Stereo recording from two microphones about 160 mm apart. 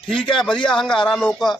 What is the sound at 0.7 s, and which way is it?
Speech, 5° left (ahead or behind).